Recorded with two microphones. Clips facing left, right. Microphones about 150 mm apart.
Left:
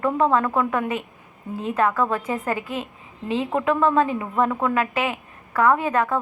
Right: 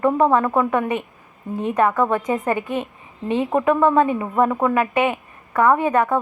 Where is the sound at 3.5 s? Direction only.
15° right (ahead or behind).